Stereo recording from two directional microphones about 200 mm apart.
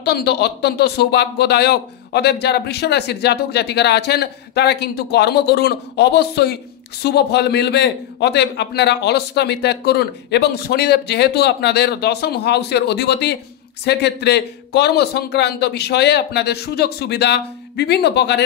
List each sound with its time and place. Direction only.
0.0 s speech: 55° left (ahead or behind)